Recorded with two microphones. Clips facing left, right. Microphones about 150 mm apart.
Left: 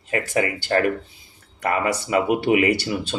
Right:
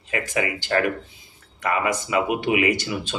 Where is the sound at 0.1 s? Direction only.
40° left (ahead or behind).